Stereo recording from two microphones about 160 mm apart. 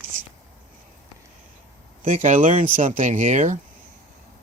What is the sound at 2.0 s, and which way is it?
Speech, 55° right (ahead or behind).